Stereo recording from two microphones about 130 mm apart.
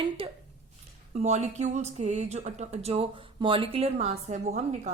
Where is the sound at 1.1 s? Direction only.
60° right (ahead or behind).